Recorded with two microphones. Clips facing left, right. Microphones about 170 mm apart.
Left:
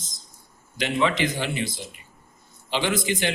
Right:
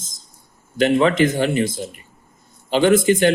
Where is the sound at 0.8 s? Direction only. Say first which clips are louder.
Right 8 dB; 45° right (ahead or behind).